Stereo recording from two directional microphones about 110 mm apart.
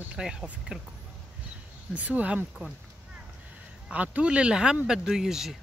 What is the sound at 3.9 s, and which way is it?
Speech, 10° right (ahead or behind).